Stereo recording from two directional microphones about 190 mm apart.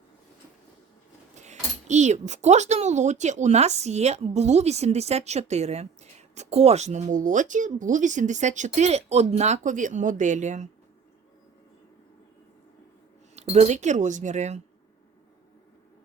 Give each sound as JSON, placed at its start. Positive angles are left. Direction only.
{"t": 1.4, "sound": "speech", "side_deg": -40}
{"t": 13.3, "sound": "speech", "side_deg": -35}